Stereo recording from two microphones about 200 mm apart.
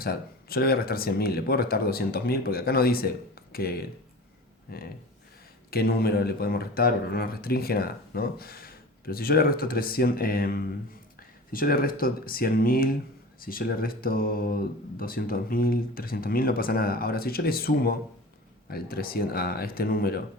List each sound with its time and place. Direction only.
0.0 s speech: 50° left (ahead or behind)